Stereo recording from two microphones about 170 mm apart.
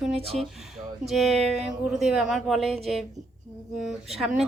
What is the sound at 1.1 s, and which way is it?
Speech, centre (ahead or behind).